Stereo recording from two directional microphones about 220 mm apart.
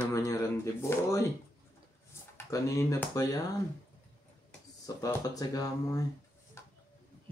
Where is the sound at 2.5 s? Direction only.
15° left (ahead or behind).